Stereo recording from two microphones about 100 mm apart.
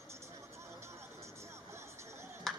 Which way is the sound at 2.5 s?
Centre (ahead or behind).